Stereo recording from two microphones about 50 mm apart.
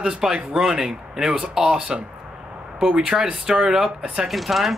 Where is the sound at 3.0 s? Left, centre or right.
Centre.